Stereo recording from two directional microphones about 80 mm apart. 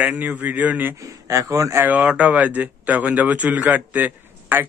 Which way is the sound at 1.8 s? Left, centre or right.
Centre.